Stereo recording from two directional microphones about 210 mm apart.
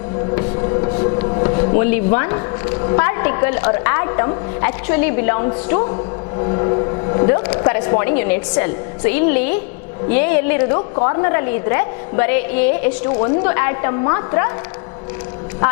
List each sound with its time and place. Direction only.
0.3 s a woman's voice: 20° left (ahead or behind)
10.8 s a woman's voice: 20° left (ahead or behind)